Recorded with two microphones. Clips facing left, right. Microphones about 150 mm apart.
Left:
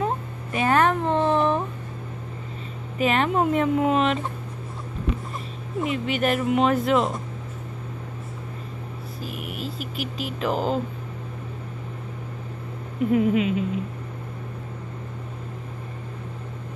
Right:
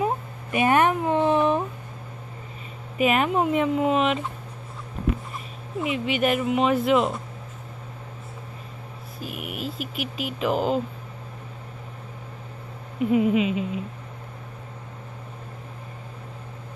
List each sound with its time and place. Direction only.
0.0 s a sound: 15° right (ahead or behind)
3.1 s speech: 5° right (ahead or behind)
5.9 s speech: 40° left (ahead or behind)
6.2 s speech: 5° right (ahead or behind)
9.2 s a sound: 40° left (ahead or behind)
10.4 s speech: 5° right (ahead or behind)
13.1 s speech: 5° right (ahead or behind)